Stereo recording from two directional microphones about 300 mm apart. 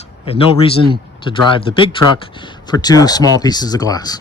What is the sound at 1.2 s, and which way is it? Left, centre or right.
Speech, centre.